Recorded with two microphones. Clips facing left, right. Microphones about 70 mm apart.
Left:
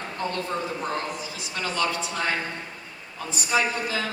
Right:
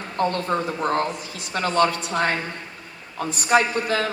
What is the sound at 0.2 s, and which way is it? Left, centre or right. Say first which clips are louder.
Speech: right 7 dB; right.